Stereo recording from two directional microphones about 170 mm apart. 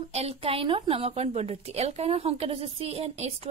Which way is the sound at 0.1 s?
35° right (ahead or behind).